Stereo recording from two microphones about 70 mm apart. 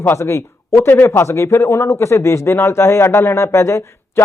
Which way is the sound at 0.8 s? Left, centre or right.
Left.